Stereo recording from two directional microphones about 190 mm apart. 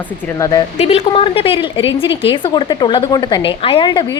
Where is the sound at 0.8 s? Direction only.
30° left (ahead or behind).